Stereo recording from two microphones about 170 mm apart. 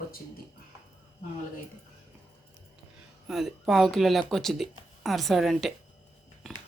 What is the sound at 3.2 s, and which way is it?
Speech, centre (ahead or behind).